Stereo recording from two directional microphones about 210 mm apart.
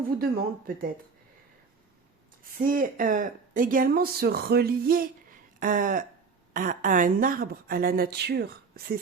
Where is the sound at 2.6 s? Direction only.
40° right (ahead or behind).